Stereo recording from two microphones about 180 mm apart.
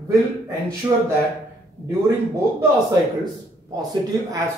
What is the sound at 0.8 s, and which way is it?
Speech, 15° right (ahead or behind).